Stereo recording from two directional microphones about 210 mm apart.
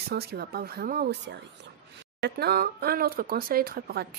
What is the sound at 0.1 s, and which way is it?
Speech, 50° right (ahead or behind).